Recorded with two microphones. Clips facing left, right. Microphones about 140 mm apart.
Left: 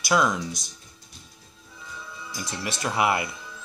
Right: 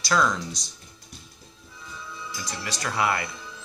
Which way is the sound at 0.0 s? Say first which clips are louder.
Left 1 dB; 15° left (ahead or behind).